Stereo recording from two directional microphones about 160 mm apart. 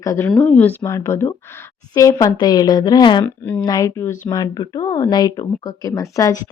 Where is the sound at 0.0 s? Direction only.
20° left (ahead or behind).